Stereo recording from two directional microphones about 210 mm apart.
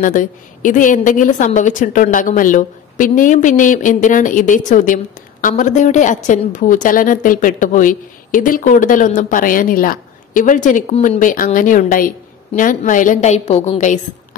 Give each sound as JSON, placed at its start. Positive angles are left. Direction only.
{"t": 0.0, "sound": "a woman's voice", "side_deg": 40}